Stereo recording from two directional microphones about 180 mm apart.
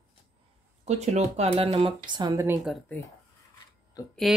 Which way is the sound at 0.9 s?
40° right (ahead or behind).